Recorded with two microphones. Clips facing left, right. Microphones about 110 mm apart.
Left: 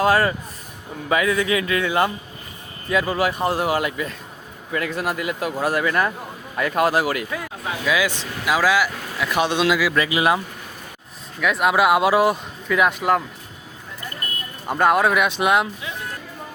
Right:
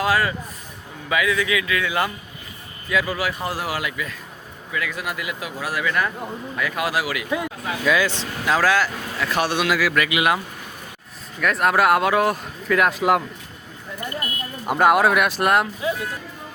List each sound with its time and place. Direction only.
0.0 s speech: 30° left (ahead or behind)
7.9 s speech: 5° left (ahead or behind)
10.0 s speech: 30° left (ahead or behind)
11.3 s speech: 5° left (ahead or behind)
14.7 s speech: 5° right (ahead or behind)
15.8 s music: 35° right (ahead or behind)